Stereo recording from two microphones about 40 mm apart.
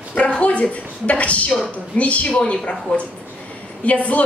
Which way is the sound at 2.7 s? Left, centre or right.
Left.